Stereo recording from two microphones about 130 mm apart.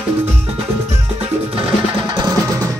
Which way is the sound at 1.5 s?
40° right (ahead or behind).